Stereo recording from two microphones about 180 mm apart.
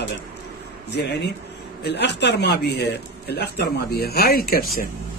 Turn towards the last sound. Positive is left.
turn(degrees=55)  # may be behind; listen again after turning